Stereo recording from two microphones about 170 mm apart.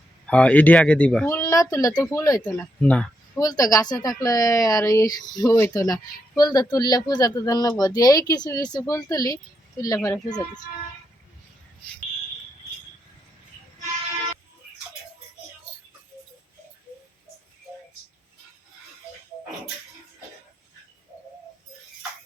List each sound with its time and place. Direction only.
0.3 s speech: 5° left (ahead or behind)
2.6 s speech: 10° left (ahead or behind)
3.3 s speech: 20° left (ahead or behind)